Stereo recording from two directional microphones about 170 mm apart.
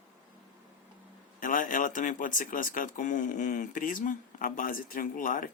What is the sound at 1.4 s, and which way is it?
Speech, 50° left (ahead or behind).